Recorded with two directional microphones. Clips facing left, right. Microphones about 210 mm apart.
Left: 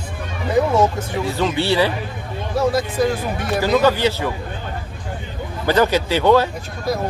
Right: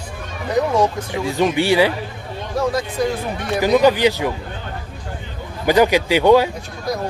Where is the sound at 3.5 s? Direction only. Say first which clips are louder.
Right 2 dB; 15° right (ahead or behind).